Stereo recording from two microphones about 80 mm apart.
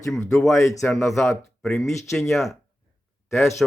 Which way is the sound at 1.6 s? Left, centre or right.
Centre.